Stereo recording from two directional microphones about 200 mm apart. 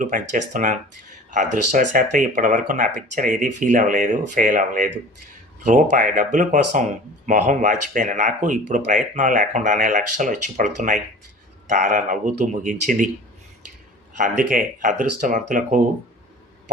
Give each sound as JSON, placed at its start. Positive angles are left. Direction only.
{"t": 0.0, "sound": "speech", "side_deg": -40}
{"t": 14.2, "sound": "speech", "side_deg": -40}